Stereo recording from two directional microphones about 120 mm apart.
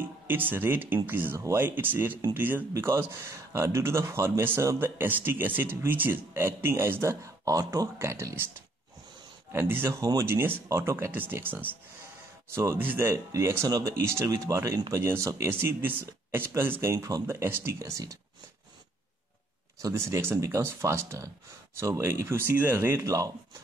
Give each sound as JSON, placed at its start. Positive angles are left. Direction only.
{"t": 0.0, "sound": "speech", "side_deg": -15}
{"t": 9.5, "sound": "speech", "side_deg": -20}
{"t": 19.8, "sound": "speech", "side_deg": -25}